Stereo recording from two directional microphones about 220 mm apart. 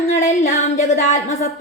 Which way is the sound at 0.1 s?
35° left (ahead or behind).